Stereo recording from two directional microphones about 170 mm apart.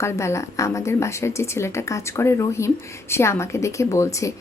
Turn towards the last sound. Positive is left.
turn(degrees=15)  # may be behind; listen again after turning